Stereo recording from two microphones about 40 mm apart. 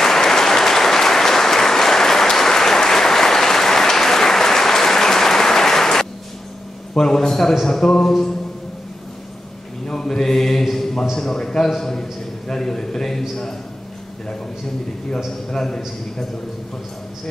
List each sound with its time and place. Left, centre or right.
0.0 s applause: centre
7.0 s a man's voice: centre
8.1 s a sound: centre
9.8 s mantra: centre
10.6 s a sound: centre
11.1 s a man's voice: centre
15.5 s a man's voice: centre